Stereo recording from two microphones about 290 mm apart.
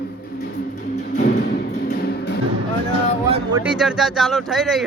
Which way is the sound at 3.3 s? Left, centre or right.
Centre.